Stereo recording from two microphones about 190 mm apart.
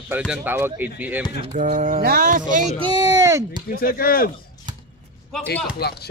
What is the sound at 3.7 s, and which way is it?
Speech, 50° left (ahead or behind).